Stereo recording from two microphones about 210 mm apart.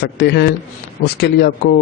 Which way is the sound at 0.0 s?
55° left (ahead or behind).